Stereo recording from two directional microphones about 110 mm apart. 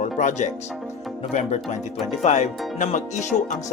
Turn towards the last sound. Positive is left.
turn(degrees=90)